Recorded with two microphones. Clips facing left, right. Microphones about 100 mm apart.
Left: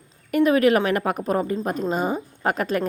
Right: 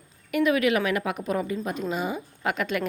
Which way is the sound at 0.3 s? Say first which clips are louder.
Left 5 dB; 40° left (ahead or behind).